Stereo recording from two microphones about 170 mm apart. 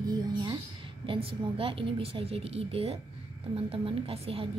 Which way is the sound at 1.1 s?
35° right (ahead or behind).